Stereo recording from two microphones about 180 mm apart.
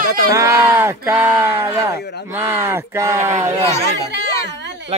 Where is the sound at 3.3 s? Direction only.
40° right (ahead or behind).